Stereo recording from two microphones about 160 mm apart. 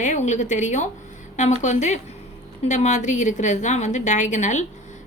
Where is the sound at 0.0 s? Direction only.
50° left (ahead or behind).